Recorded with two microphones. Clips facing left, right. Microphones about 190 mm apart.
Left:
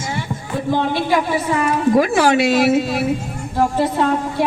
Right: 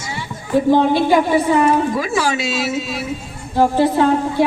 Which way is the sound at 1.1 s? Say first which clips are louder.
Right 3 dB; 25° right (ahead or behind).